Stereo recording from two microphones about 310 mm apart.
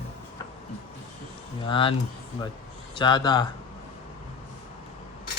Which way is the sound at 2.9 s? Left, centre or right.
Centre.